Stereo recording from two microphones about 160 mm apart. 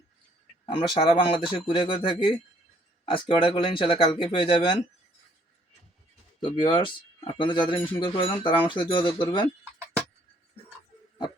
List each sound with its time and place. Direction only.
0.6 s speech: 30° left (ahead or behind)
6.4 s speech: 30° left (ahead or behind)